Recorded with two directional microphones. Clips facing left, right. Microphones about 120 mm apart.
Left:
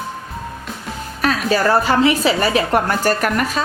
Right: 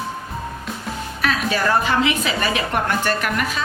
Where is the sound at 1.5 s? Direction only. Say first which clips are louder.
Left 5 dB; 35° left (ahead or behind).